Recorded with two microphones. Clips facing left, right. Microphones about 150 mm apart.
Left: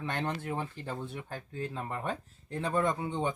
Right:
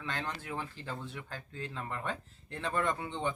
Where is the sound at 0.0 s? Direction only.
20° left (ahead or behind).